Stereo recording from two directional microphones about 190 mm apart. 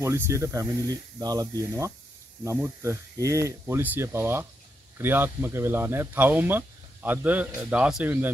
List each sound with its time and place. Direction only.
0.0 s speech: 15° right (ahead or behind)